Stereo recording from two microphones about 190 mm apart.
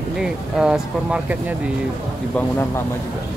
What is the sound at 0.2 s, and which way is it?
Speech, 5° right (ahead or behind).